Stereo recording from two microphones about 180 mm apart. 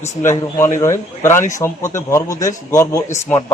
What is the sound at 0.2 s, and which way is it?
A man's voice, 15° left (ahead or behind).